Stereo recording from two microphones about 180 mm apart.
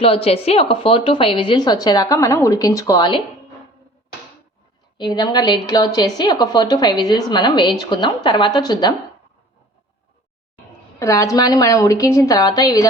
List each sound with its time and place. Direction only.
0.0 s a woman's voice: 30° left (ahead or behind)
4.9 s a woman's voice: 25° left (ahead or behind)
11.0 s a woman's voice: 15° left (ahead or behind)